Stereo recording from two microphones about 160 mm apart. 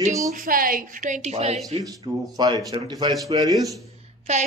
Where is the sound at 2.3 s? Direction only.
25° right (ahead or behind).